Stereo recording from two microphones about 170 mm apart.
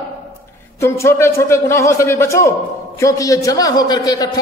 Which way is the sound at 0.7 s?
15° left (ahead or behind).